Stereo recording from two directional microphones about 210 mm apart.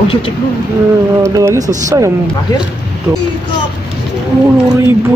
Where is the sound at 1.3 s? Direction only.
15° right (ahead or behind).